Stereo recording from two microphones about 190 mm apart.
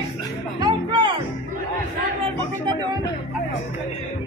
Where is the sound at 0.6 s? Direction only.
25° right (ahead or behind).